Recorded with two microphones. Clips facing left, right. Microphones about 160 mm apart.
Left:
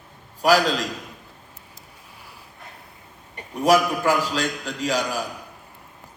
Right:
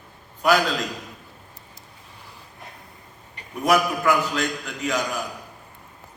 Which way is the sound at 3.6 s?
30° left (ahead or behind).